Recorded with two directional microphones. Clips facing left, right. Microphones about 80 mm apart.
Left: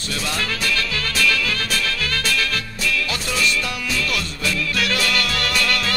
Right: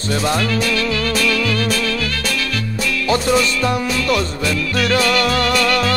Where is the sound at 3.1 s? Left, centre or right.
Right.